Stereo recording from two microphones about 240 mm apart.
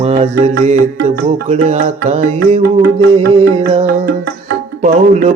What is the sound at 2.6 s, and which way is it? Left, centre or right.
Music, right.